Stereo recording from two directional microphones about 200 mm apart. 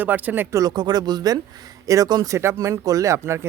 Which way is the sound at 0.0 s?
10° right (ahead or behind).